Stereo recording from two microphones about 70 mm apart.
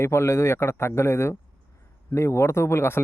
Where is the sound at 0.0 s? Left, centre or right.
Left.